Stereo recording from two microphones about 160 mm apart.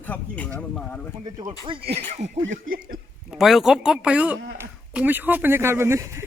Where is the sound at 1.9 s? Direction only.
45° right (ahead or behind).